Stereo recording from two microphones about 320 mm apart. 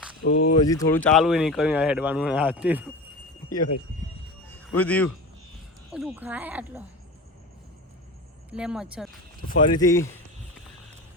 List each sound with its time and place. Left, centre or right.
0.3 s speech: left
0.6 s speech: centre
4.7 s speech: centre
8.5 s speech: centre
9.5 s speech: left
9.7 s speech: centre